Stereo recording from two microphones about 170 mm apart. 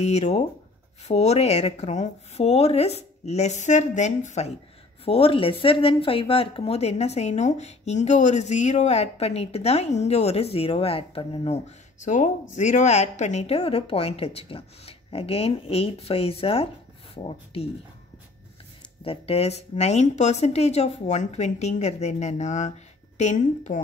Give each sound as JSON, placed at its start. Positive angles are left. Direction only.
{"t": 0.0, "sound": "speech", "side_deg": 40}
{"t": 19.0, "sound": "speech", "side_deg": 35}